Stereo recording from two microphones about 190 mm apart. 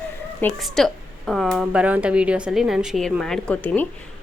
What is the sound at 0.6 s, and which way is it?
A woman's voice, centre (ahead or behind).